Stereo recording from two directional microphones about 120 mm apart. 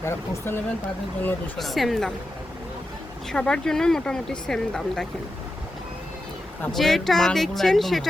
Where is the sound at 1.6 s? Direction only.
Centre (ahead or behind).